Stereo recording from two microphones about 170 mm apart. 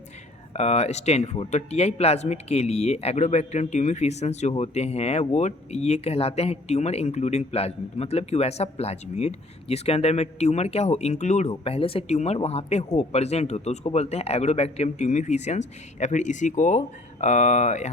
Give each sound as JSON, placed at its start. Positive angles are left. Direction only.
{"t": 0.5, "sound": "speech", "side_deg": 40}